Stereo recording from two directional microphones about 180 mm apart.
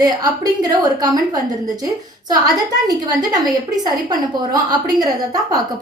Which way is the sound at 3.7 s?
20° right (ahead or behind).